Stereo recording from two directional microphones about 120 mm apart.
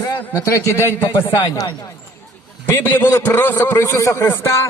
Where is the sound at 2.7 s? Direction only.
20° left (ahead or behind).